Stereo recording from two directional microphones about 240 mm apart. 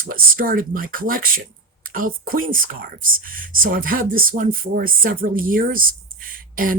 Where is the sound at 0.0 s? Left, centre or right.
Right.